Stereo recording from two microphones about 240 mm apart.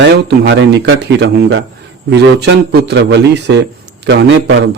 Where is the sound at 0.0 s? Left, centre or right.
Right.